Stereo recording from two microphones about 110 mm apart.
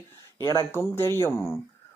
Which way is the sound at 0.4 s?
25° left (ahead or behind).